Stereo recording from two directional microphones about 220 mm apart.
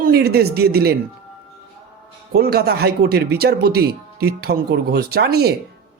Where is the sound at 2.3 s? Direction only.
45° right (ahead or behind).